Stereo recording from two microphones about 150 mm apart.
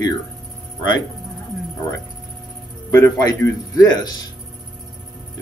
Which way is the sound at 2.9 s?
25° left (ahead or behind).